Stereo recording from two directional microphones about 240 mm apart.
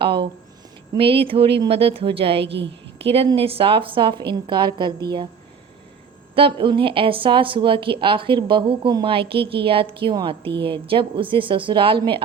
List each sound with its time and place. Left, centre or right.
0.0 s a woman's voice: right
2.4 s a woman's voice: right
3.0 s a woman's voice: right
6.3 s a woman's voice: right